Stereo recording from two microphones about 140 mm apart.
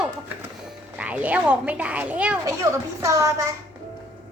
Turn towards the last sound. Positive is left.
turn(degrees=-20)  # may be behind; listen again after turning